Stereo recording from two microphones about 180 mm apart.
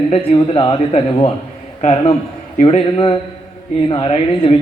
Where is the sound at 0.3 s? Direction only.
30° left (ahead or behind).